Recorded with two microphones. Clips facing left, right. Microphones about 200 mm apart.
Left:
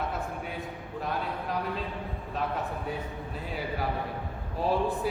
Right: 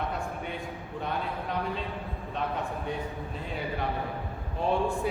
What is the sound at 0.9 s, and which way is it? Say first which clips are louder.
A man's voice: even; centre (ahead or behind).